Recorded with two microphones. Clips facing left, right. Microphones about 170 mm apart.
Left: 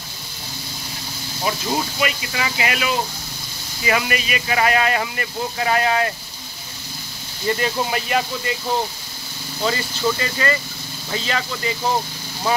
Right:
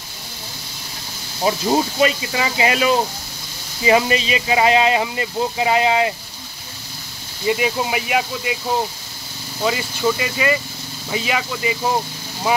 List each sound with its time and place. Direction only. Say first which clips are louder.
1.4 s speech: right 5 dB; 30° right (ahead or behind)
7.4 s speech: right 2 dB; 10° right (ahead or behind)
9.6 s speech: right 2 dB; 10° right (ahead or behind)